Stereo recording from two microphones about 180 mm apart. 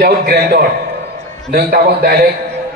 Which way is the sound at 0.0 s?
60° right (ahead or behind).